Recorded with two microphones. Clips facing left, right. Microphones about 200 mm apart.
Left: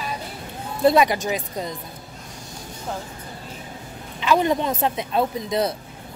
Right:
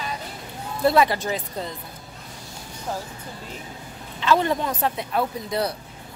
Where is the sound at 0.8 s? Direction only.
15° left (ahead or behind).